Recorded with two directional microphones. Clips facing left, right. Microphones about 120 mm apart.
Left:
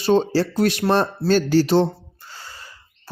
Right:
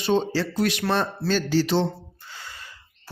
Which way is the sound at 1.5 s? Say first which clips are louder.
Left 5 dB; 45° left (ahead or behind).